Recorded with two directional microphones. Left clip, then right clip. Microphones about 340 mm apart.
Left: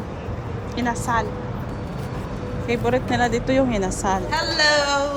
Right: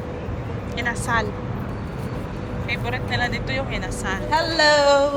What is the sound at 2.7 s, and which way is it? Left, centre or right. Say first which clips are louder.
Speech: left 5 dB; left.